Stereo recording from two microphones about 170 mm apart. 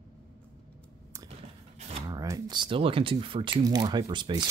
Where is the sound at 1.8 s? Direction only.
40° right (ahead or behind).